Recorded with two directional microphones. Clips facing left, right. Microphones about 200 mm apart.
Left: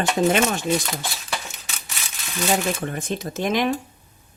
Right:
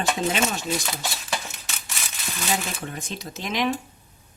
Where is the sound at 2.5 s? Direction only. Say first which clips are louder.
Left 6 dB; 50° left (ahead or behind).